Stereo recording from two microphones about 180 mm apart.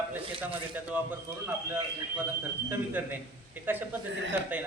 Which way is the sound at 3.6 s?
10° right (ahead or behind).